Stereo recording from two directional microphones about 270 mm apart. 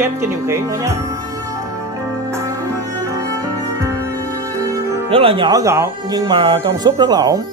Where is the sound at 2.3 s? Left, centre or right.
Centre.